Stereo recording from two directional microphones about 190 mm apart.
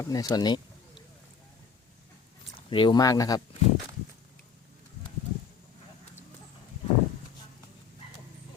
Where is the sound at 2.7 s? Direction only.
25° left (ahead or behind).